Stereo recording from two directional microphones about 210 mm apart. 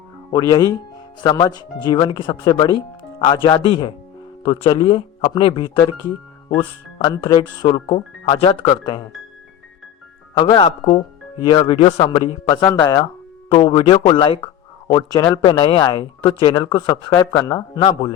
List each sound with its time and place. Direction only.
0.3 s speech: 15° left (ahead or behind)
10.3 s speech: 20° left (ahead or behind)